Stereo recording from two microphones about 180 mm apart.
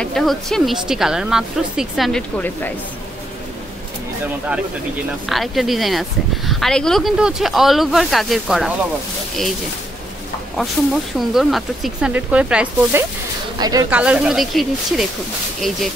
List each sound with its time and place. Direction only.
0.0 s speech: centre (ahead or behind)
5.3 s speech: centre (ahead or behind)
11.1 s speech: centre (ahead or behind)
13.6 s speech: 20° right (ahead or behind)
13.8 s speech: 10° right (ahead or behind)